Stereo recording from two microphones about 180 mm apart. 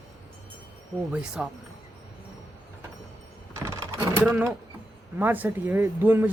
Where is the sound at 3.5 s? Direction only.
15° right (ahead or behind).